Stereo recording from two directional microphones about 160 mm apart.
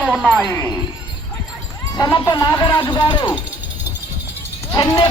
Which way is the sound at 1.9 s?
25° left (ahead or behind).